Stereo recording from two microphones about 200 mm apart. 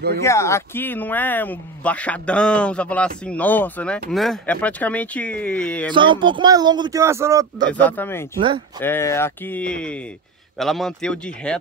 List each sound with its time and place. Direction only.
0.2 s speech: 15° left (ahead or behind)
5.9 s speech: 25° right (ahead or behind)
7.8 s speech: 10° left (ahead or behind)
8.4 s speech: 25° right (ahead or behind)
8.8 s speech: 10° left (ahead or behind)